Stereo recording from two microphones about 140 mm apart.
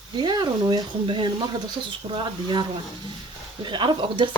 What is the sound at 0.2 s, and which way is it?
Speech, 30° right (ahead or behind).